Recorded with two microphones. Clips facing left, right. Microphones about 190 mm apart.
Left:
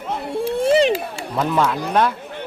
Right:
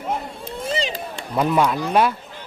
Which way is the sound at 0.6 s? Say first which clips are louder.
Left 10 dB; 65° left (ahead or behind).